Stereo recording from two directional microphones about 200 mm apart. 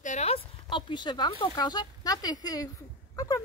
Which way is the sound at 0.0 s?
35° left (ahead or behind).